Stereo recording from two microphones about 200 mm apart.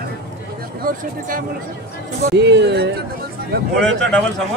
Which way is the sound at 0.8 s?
40° right (ahead or behind).